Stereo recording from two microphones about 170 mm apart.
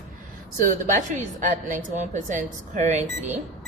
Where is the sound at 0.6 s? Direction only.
50° right (ahead or behind).